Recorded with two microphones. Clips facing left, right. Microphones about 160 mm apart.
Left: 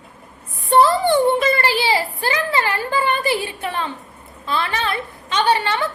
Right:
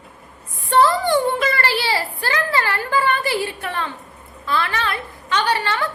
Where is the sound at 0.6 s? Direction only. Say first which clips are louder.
Left 2 dB; 20° left (ahead or behind).